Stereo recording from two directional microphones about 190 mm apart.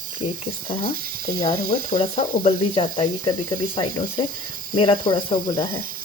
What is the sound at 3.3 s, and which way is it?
Speech, 50° right (ahead or behind).